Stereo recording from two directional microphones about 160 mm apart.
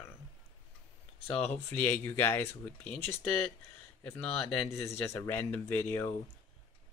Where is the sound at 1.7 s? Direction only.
15° left (ahead or behind).